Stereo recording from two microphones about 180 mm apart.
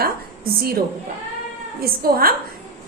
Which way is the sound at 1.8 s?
55° right (ahead or behind).